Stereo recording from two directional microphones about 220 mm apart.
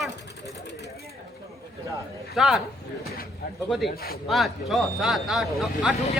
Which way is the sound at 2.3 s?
Centre (ahead or behind).